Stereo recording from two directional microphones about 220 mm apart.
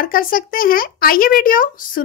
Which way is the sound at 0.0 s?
40° left (ahead or behind).